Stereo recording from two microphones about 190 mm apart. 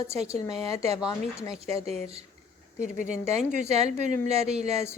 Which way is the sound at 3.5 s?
35° right (ahead or behind).